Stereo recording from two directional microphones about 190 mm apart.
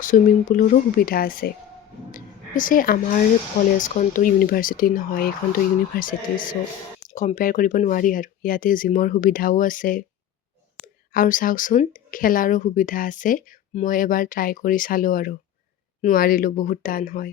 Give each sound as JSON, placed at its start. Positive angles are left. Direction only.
{"t": 0.0, "sound": "a woman's voice", "side_deg": 45}